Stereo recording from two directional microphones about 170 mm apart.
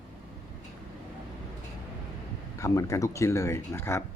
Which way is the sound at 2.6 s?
20° left (ahead or behind).